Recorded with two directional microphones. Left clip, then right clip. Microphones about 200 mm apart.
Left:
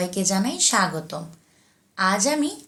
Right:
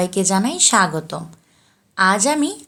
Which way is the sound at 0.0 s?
55° right (ahead or behind).